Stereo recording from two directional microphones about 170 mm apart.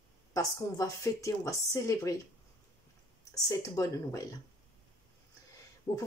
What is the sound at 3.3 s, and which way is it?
Speech, 20° left (ahead or behind).